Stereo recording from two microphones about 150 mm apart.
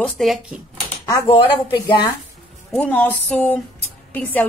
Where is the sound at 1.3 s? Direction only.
35° left (ahead or behind).